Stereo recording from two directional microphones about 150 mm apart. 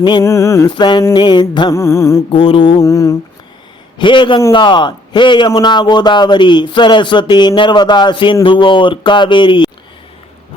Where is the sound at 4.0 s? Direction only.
35° left (ahead or behind).